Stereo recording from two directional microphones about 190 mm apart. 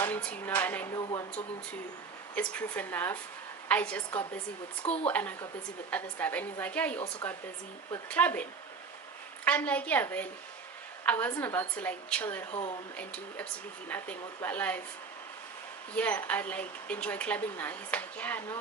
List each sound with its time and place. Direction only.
0.0 s a woman's voice: 5° left (ahead or behind)
0.9 s speech: 20° left (ahead or behind)
2.3 s a woman's voice: 5° left (ahead or behind)
8.1 s a woman's voice: 10° left (ahead or behind)
12.5 s speech: 30° left (ahead or behind)
13.0 s a woman's voice: 5° left (ahead or behind)
16.0 s a woman's voice: 5° left (ahead or behind)